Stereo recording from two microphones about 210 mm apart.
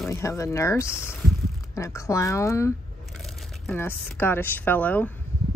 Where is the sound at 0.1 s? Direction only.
15° left (ahead or behind).